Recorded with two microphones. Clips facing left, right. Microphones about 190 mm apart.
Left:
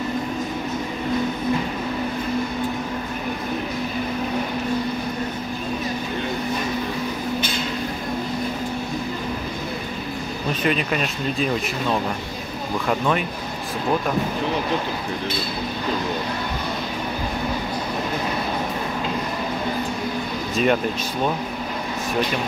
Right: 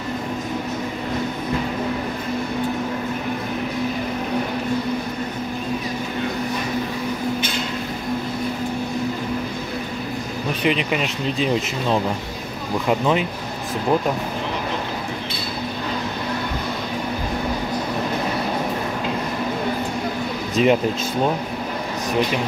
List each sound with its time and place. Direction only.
10.9 s speech: 20° right (ahead or behind)
20.6 s speech: 90° right